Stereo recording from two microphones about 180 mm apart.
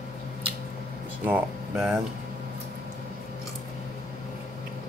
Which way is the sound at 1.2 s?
10° right (ahead or behind).